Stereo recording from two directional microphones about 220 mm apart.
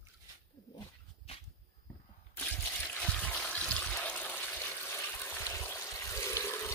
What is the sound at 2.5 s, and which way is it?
Trickle, 5° left (ahead or behind).